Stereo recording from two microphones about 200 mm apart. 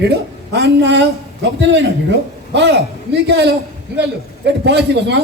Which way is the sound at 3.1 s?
55° right (ahead or behind).